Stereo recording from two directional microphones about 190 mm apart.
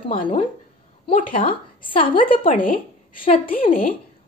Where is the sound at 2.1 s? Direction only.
45° left (ahead or behind).